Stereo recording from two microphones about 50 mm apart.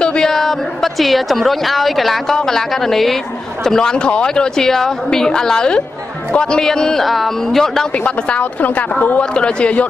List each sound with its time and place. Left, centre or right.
0.0 s a woman's voice: centre
8.3 s a woman's voice: left
9.3 s a woman's voice: centre